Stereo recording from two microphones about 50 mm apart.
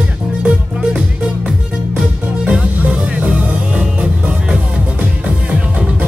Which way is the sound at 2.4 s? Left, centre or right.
Right.